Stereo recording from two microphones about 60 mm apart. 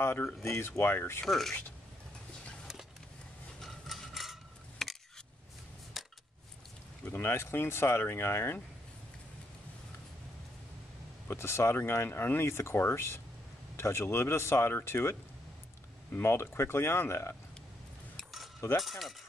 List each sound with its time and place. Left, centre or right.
0.0 s speech: left
1.2 s speech: centre
3.6 s a sound: centre
6.0 s a sound: centre
7.1 s speech: left
11.2 s speech: left
18.8 s speech: centre